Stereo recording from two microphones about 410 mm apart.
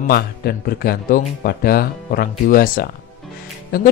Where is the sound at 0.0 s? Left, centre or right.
Left.